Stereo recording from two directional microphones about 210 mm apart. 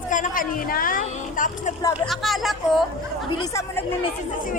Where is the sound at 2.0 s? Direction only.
Centre (ahead or behind).